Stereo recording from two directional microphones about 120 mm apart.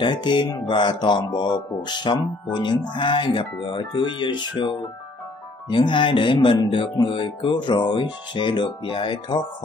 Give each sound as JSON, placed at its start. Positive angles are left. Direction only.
{"t": 0.0, "sound": "speech", "side_deg": 40}